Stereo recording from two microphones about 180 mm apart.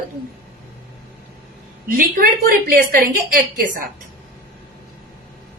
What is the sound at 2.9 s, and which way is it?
Speech, 50° right (ahead or behind).